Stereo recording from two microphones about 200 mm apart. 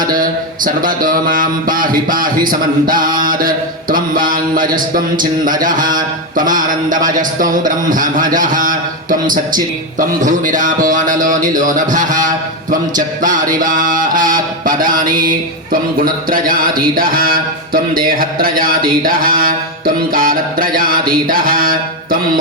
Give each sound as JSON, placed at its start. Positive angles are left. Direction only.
{"t": 0.0, "sound": "mantra", "side_deg": -45}
{"t": 6.3, "sound": "speech", "side_deg": -40}
{"t": 8.4, "sound": "a sound", "side_deg": -40}
{"t": 10.0, "sound": "speech", "side_deg": -40}
{"t": 13.6, "sound": "mantra", "side_deg": -40}